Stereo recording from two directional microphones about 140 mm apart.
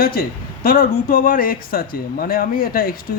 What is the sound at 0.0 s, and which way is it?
Speech, 90° left.